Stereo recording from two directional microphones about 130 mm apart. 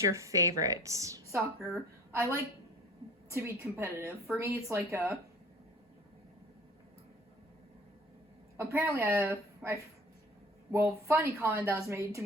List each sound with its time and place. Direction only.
0.0 s a woman's voice: 25° right (ahead or behind)
8.5 s a woman's voice: 20° right (ahead or behind)